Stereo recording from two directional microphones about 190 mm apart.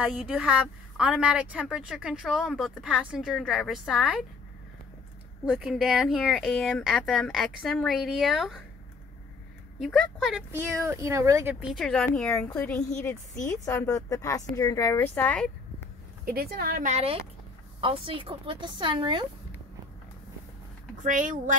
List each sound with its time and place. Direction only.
0.0 s a woman's voice: 5° right (ahead or behind)
5.5 s a woman's voice: centre (ahead or behind)
9.8 s a woman's voice: centre (ahead or behind)
10.5 s speech: 15° right (ahead or behind)
11.6 s a woman's voice: centre (ahead or behind)
16.3 s a woman's voice: 50° right (ahead or behind); by 19.2 s 25° right (ahead or behind)
21.0 s speech: 40° right (ahead or behind)